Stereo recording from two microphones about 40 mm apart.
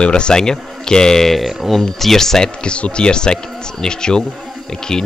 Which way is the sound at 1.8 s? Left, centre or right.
Centre.